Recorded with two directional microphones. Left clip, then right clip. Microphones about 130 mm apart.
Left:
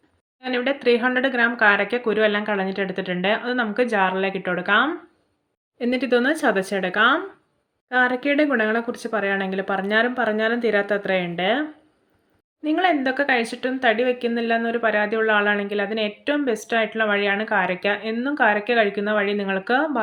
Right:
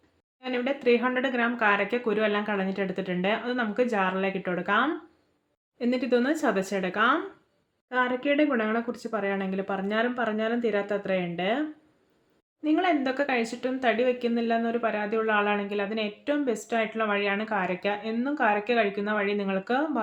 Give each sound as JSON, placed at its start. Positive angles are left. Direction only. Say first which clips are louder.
{"t": 0.4, "sound": "a woman's voice", "louder": "left 5 dB", "side_deg": 25}
{"t": 12.6, "sound": "a woman's voice", "louder": "left 5 dB", "side_deg": 20}